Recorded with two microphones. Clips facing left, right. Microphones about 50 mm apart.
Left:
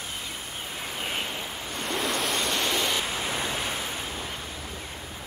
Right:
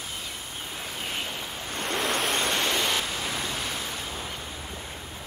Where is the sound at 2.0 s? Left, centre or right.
Right.